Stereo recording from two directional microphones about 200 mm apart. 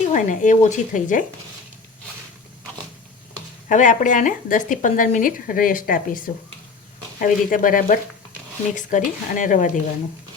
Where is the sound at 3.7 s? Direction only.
40° left (ahead or behind).